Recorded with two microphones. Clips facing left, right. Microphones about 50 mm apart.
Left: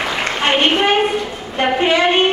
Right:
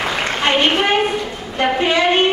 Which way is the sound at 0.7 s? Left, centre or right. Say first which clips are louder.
Left 1 dB; centre.